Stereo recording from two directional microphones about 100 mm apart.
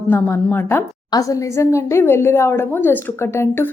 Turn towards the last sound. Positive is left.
turn(degrees=25)  # may be behind; listen again after turning